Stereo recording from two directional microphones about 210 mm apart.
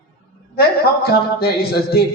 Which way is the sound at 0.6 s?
50° left (ahead or behind).